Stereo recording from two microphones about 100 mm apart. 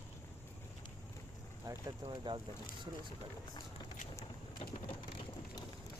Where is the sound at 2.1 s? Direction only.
55° right (ahead or behind).